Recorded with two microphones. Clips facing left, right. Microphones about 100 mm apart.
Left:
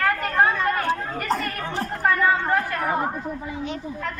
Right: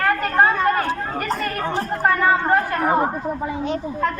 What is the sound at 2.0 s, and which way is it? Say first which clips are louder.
Speech: right 2 dB; 40° right (ahead or behind).